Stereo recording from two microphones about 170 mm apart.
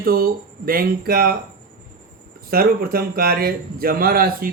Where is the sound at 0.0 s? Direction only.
60° right (ahead or behind).